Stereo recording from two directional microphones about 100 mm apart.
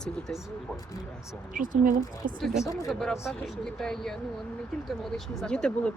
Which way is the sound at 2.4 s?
5° right (ahead or behind).